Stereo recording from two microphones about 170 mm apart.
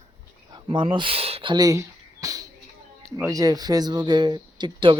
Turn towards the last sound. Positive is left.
turn(degrees=-25)  # may be behind; listen again after turning